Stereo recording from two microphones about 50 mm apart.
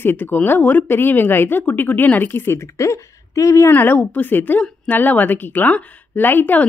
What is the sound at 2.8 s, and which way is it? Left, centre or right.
Speech, left.